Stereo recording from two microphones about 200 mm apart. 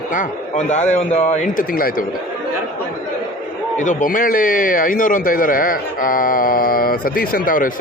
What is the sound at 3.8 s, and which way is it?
A man's voice, 45° left (ahead or behind).